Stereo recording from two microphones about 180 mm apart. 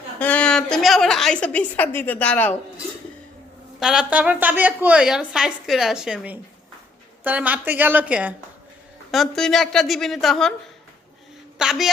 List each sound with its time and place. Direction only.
0.2 s a woman's voice: 5° left (ahead or behind)
3.8 s a woman's voice: 5° right (ahead or behind)
11.5 s a woman's voice: 5° right (ahead or behind)